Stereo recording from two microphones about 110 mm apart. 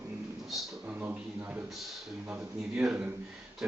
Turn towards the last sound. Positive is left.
turn(degrees=-10)  # may be behind; listen again after turning